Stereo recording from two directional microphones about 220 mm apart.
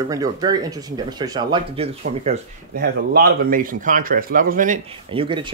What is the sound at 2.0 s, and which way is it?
Speech, 40° right (ahead or behind).